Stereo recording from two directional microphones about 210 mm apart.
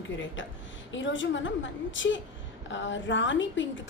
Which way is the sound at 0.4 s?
60° left (ahead or behind).